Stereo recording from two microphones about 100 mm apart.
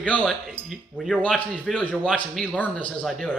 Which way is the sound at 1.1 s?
10° left (ahead or behind).